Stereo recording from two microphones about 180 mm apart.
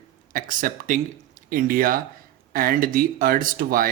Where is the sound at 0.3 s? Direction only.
50° right (ahead or behind).